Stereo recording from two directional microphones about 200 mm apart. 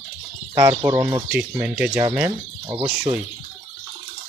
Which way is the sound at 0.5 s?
20° right (ahead or behind).